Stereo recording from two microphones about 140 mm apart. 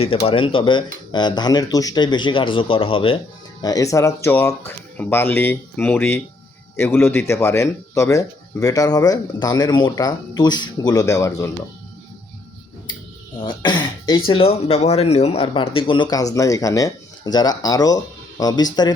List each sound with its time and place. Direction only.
0.0 s speech: 45° left (ahead or behind)
3.6 s speech: 25° left (ahead or behind)
13.4 s speech: 35° left (ahead or behind)
16.0 s speech: 25° left (ahead or behind)